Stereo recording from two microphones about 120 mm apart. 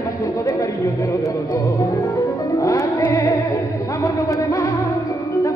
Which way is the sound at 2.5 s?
30° left (ahead or behind).